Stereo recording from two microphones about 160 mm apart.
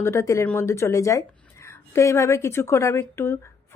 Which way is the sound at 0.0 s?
20° left (ahead or behind).